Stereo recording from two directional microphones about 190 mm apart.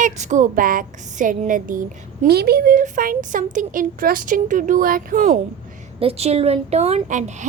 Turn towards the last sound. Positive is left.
turn(degrees=-40)  # may be behind; listen again after turning